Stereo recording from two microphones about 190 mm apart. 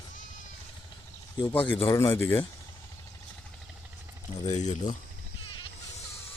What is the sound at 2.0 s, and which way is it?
Speech, 15° left (ahead or behind).